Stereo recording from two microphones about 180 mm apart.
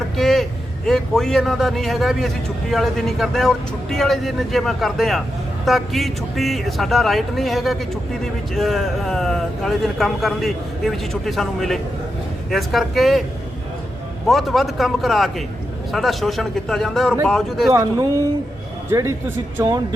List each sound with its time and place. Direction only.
0.2 s vehicle: centre (ahead or behind)
0.9 s a man's voice: 5° left (ahead or behind)
14.3 s a man's voice: centre (ahead or behind)
17.7 s speech: 20° right (ahead or behind)